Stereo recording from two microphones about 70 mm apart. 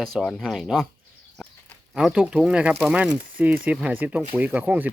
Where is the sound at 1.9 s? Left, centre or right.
Centre.